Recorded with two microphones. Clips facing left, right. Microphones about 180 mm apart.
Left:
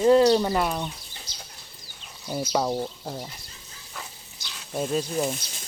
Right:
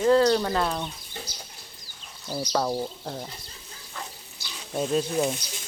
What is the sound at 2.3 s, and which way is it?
Speech, 10° left (ahead or behind).